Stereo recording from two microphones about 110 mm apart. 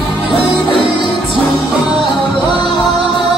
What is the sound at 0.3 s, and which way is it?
Music, 55° right (ahead or behind).